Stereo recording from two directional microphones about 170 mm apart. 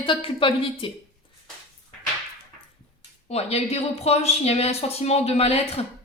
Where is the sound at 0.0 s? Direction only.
30° left (ahead or behind).